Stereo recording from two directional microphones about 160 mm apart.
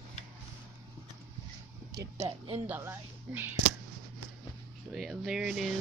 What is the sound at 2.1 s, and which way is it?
Speech, 40° right (ahead or behind).